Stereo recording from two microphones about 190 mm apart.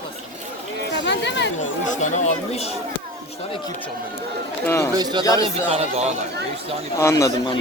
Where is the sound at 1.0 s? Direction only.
65° left (ahead or behind).